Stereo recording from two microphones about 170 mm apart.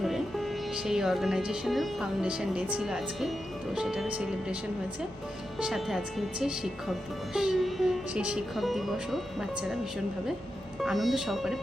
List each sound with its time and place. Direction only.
0.0 s music: centre (ahead or behind)
0.9 s speech: centre (ahead or behind)
5.5 s speech: 5° right (ahead or behind)
10.8 s speech: centre (ahead or behind)